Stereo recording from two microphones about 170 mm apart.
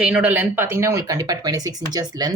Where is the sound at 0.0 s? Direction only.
5° right (ahead or behind).